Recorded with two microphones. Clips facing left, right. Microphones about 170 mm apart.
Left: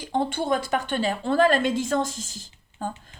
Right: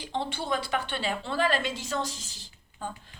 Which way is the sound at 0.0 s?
45° left (ahead or behind).